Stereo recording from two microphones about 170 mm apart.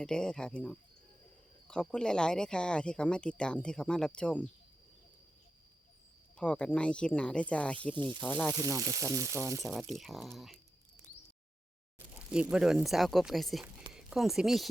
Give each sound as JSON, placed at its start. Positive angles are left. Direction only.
{"t": 0.0, "sound": "speech", "side_deg": 5}
{"t": 6.3, "sound": "speech", "side_deg": 5}
{"t": 8.5, "sound": "speech", "side_deg": -20}
{"t": 9.6, "sound": "speech", "side_deg": 0}
{"t": 12.3, "sound": "speech", "side_deg": -5}